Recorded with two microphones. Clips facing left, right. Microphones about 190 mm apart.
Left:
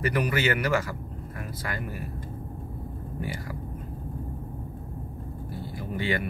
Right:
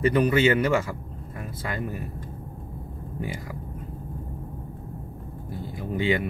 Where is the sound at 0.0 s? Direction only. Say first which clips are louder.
Right 6 dB; 25° right (ahead or behind).